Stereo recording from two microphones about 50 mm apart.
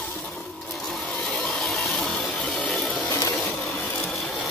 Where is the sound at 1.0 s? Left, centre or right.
Left; by 4.3 s centre.